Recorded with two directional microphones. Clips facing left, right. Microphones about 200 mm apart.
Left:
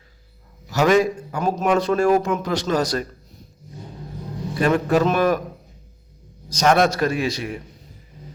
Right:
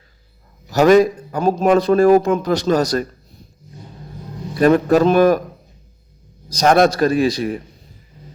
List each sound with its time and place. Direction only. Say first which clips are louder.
0.7 s a man's voice: right 6 dB; 40° right (ahead or behind)
4.6 s a man's voice: right 6 dB; 40° right (ahead or behind)
6.5 s a man's voice: right 4 dB; 35° right (ahead or behind)